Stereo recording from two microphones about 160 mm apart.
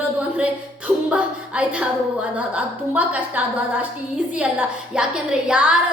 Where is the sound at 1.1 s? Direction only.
5° right (ahead or behind).